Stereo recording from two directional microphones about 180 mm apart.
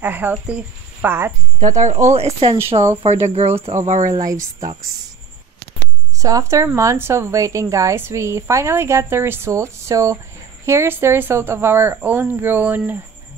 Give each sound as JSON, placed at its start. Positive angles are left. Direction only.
{"t": 0.0, "sound": "a woman's voice", "side_deg": -10}
{"t": 1.6, "sound": "a woman's voice", "side_deg": -40}
{"t": 4.1, "sound": "a woman's voice", "side_deg": -20}
{"t": 6.1, "sound": "a woman's voice", "side_deg": -20}